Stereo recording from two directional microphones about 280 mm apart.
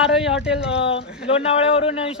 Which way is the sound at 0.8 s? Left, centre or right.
Centre.